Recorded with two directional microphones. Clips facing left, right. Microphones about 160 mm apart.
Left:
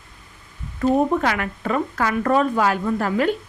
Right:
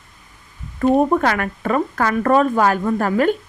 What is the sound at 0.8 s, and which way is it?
Speech, 50° right (ahead or behind).